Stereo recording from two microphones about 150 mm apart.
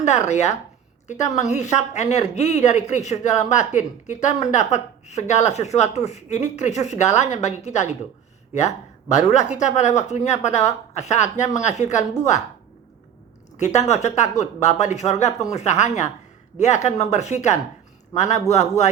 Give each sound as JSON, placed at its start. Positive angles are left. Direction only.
{"t": 0.0, "sound": "a woman's voice", "side_deg": 50}
{"t": 13.6, "sound": "a woman's voice", "side_deg": 50}